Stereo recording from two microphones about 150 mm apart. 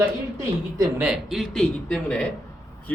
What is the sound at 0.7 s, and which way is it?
Speech, 20° right (ahead or behind).